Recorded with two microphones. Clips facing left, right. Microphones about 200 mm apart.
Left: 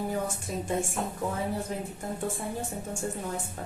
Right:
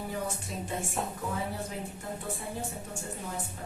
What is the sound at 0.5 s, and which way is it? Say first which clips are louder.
Music: left 5 dB; 45° left (ahead or behind).